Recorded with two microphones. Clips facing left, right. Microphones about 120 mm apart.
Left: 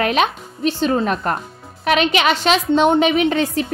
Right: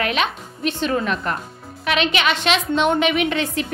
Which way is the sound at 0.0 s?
40° left (ahead or behind).